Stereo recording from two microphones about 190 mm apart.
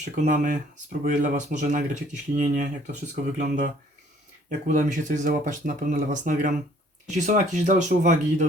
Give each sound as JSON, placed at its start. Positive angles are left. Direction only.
{"t": 0.0, "sound": "speech", "side_deg": -40}